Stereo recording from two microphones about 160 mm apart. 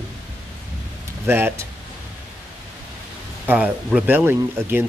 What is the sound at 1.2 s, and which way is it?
Speech, 15° right (ahead or behind).